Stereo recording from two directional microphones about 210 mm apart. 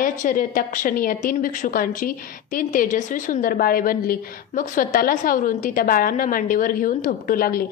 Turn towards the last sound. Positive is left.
turn(degrees=45)  # may be behind; listen again after turning